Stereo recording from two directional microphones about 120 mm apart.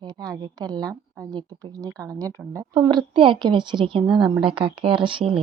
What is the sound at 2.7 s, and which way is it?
Speech, 40° right (ahead or behind).